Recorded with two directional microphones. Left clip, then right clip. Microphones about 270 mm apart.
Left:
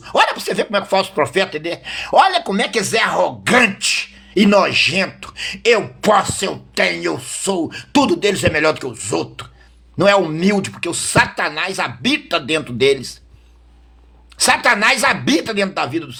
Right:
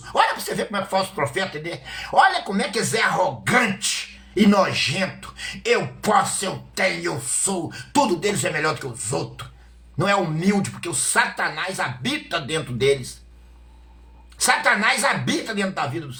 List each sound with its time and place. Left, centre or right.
0.1 s speech: left
14.3 s speech: left